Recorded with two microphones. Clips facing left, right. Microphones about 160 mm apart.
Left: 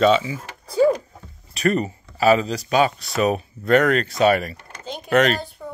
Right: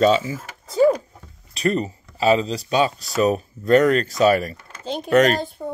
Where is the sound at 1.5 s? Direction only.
30° right (ahead or behind).